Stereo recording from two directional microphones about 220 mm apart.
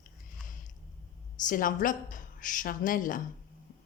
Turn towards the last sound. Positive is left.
turn(degrees=40)  # may be behind; listen again after turning